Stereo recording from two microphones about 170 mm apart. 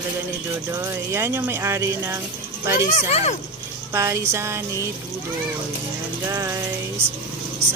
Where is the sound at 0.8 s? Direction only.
15° right (ahead or behind).